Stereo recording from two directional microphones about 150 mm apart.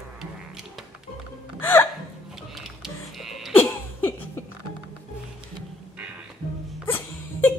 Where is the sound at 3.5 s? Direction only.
10° left (ahead or behind).